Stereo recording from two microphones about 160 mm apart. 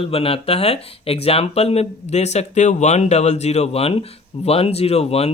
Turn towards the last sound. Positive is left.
turn(degrees=40)  # may be behind; listen again after turning